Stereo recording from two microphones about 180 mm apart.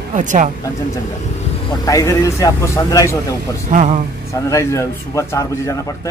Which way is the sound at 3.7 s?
35° right (ahead or behind).